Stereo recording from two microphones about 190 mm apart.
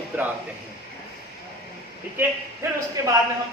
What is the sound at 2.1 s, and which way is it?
Speech, 15° right (ahead or behind).